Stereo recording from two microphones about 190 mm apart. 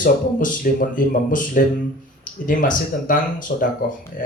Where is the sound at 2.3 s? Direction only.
45° left (ahead or behind).